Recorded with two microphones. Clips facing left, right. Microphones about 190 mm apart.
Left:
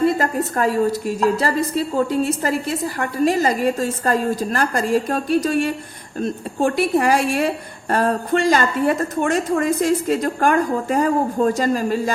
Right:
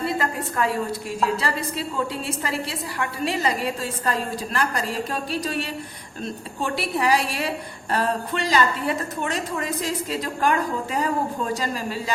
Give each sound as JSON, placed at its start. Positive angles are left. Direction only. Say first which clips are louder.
{"t": 0.0, "sound": "a woman's voice", "louder": "left 7 dB", "side_deg": 45}